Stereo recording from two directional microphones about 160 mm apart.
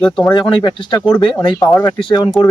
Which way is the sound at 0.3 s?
30° left (ahead or behind).